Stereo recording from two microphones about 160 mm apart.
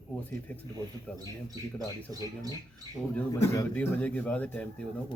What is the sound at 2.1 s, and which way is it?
Speech, 25° right (ahead or behind).